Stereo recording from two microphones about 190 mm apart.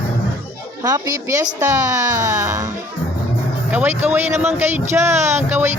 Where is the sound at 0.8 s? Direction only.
15° right (ahead or behind).